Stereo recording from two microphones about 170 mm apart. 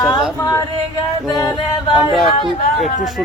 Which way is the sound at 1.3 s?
20° left (ahead or behind).